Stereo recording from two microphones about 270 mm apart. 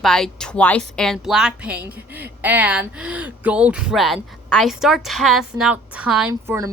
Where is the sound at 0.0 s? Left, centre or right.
Centre.